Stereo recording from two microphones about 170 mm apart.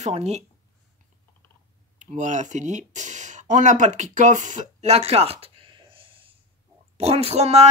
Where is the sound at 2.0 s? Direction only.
45° right (ahead or behind).